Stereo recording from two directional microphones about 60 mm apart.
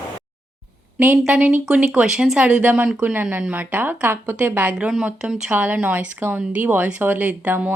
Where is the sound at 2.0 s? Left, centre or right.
Centre.